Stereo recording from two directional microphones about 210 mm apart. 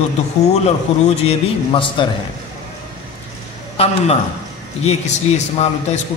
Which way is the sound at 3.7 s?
30° left (ahead or behind).